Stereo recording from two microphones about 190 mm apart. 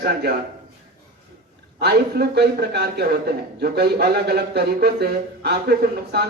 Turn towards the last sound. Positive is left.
turn(degrees=-55)  # may be behind; listen again after turning